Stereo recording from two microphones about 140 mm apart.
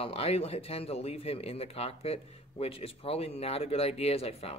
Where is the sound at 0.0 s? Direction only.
45° left (ahead or behind).